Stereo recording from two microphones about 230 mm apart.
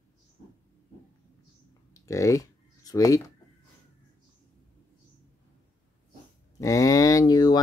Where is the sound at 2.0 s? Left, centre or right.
Centre.